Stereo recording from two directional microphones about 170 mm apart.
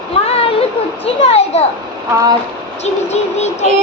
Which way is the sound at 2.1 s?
20° right (ahead or behind).